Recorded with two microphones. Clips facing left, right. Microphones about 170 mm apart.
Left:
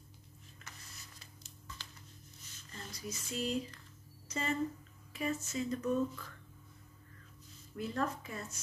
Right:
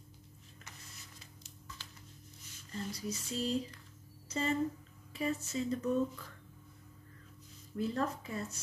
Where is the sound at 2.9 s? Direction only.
35° right (ahead or behind).